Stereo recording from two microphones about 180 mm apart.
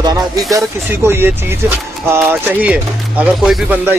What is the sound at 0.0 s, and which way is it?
Speech, 20° right (ahead or behind).